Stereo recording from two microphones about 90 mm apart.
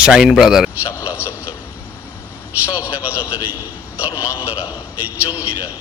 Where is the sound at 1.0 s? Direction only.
20° right (ahead or behind).